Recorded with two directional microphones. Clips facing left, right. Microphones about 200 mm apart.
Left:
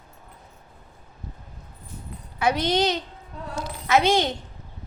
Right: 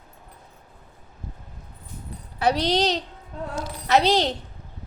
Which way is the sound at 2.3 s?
35° right (ahead or behind).